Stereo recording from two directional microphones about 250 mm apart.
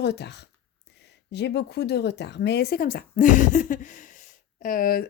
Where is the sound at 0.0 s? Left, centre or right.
Left.